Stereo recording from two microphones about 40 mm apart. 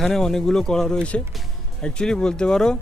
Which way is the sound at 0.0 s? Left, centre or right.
Centre.